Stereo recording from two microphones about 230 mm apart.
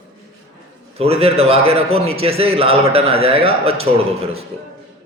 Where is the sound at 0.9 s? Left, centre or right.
Right.